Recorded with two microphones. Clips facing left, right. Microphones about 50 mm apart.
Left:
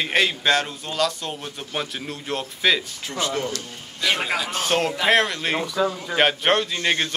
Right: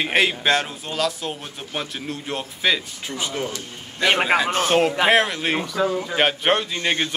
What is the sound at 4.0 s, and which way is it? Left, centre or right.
Speech, right.